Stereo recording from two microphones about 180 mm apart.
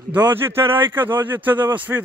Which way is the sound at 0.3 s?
15° right (ahead or behind).